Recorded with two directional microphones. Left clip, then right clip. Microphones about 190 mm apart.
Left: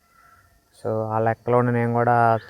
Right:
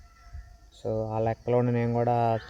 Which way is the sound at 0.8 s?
Centre (ahead or behind).